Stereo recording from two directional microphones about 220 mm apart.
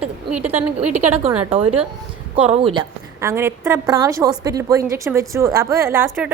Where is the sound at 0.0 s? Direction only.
5° right (ahead or behind).